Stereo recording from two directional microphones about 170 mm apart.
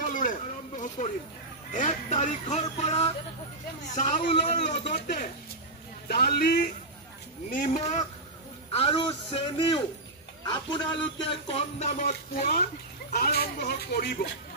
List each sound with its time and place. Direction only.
0.0 s a sound: 50° left (ahead or behind)
1.7 s music: 45° left (ahead or behind)
6.0 s speech: 60° left (ahead or behind)
7.4 s music: 50° left (ahead or behind)
8.7 s a man's voice: 30° left (ahead or behind); by 12.6 s 55° left (ahead or behind)
13.1 s speech: 65° left (ahead or behind)